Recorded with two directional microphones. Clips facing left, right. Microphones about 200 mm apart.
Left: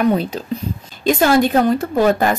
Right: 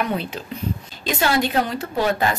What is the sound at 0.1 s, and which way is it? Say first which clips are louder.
Speech: left 7 dB; 40° left (ahead or behind).